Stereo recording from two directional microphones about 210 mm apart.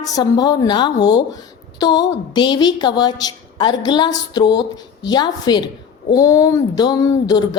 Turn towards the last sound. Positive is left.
turn(degrees=20)  # may be behind; listen again after turning